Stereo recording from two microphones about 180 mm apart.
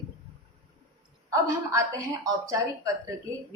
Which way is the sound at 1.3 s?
15° right (ahead or behind).